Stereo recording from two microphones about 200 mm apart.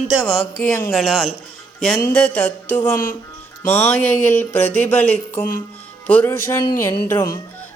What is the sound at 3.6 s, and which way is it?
Speech, 10° left (ahead or behind).